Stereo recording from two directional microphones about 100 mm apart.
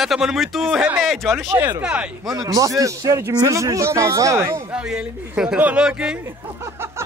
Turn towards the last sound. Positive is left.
turn(degrees=-10)  # may be behind; listen again after turning